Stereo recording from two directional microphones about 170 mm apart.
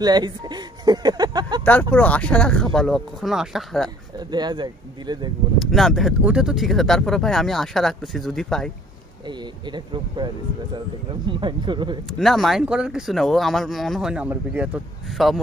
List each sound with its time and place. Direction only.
0.0 s speech: 25° right (ahead or behind)
1.6 s speech: 10° left (ahead or behind)
4.3 s speech: 25° right (ahead or behind)
5.6 s speech: centre (ahead or behind)
9.7 s speech: 25° right (ahead or behind)
12.1 s speech: centre (ahead or behind)